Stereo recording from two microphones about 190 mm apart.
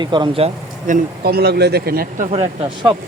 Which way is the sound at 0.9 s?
55° right (ahead or behind).